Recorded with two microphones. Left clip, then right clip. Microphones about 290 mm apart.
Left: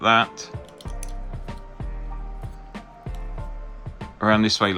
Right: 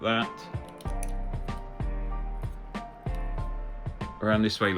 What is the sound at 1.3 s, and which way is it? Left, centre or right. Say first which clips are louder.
Music: even; centre.